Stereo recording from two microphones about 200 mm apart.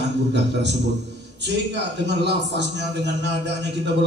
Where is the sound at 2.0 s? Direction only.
60° right (ahead or behind).